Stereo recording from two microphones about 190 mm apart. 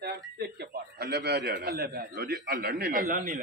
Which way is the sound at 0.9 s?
60° right (ahead or behind).